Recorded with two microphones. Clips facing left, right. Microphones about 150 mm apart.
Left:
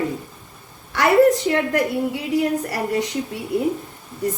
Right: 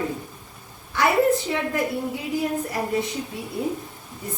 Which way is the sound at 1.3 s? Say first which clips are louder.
Left 4 dB; 75° left (ahead or behind).